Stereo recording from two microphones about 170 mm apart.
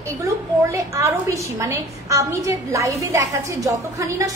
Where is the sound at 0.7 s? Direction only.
15° right (ahead or behind).